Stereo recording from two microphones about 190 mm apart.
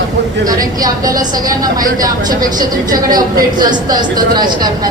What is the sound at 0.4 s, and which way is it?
Speech, 20° right (ahead or behind).